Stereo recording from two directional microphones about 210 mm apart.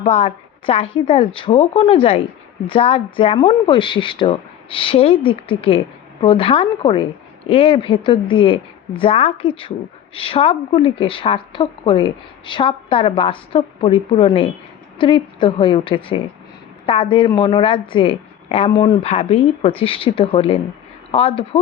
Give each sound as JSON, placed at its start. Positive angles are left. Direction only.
{"t": 0.0, "sound": "speech", "side_deg": 30}